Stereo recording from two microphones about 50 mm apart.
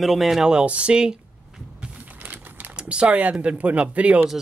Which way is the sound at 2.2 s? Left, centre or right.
Right.